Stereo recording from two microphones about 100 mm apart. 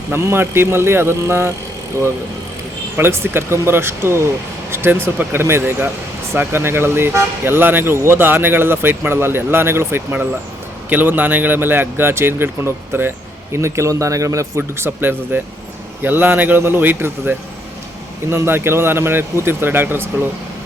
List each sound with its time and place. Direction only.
0.1 s speech: 25° right (ahead or behind)
3.0 s speech: 25° right (ahead or behind)